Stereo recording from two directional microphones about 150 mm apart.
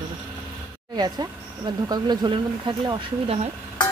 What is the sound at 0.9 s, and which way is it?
Speech, 25° right (ahead or behind).